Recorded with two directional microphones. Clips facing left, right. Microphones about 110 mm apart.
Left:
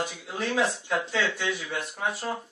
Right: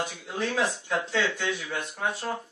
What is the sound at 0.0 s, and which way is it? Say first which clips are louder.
Speech: even; centre (ahead or behind).